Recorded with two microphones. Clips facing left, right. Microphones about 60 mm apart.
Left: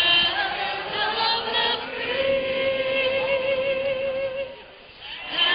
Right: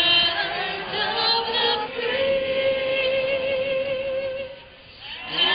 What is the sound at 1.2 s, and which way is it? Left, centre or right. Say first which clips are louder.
Singing: right 1 dB; centre.